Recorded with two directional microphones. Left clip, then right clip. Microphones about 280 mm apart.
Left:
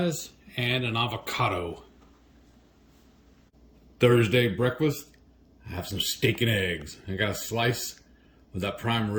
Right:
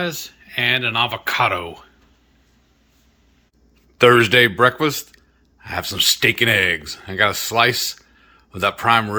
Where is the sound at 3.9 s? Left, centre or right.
Centre.